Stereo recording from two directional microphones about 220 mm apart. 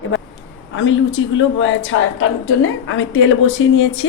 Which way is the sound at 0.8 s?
60° left (ahead or behind).